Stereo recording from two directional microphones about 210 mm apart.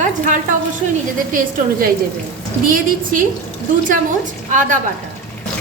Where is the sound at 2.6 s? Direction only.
40° right (ahead or behind).